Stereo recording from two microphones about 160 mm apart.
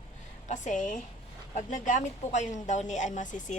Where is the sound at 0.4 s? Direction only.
50° left (ahead or behind).